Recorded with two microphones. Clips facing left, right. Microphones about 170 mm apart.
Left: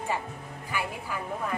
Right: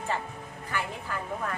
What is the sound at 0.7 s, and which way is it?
Speech, 10° left (ahead or behind).